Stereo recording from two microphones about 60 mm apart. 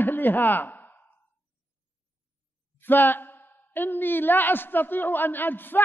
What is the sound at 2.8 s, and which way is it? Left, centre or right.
A woman's voice, left.